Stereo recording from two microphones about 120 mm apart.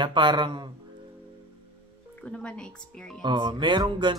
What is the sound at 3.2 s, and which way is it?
Speech, 40° right (ahead or behind).